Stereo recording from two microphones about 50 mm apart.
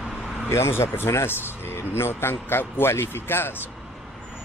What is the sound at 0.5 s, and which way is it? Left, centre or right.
A man's voice, left.